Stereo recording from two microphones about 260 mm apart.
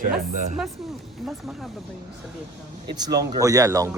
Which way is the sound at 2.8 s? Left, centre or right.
Centre.